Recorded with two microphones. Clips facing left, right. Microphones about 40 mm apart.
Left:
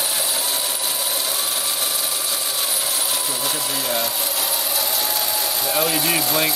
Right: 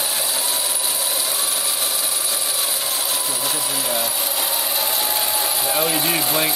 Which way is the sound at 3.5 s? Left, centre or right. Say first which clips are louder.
Even; centre.